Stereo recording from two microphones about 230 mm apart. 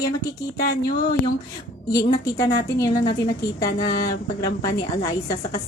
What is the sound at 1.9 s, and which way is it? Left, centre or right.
Speech, centre.